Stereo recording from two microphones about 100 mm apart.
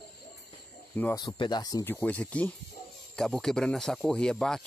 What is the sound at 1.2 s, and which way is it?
Speech, 50° left (ahead or behind).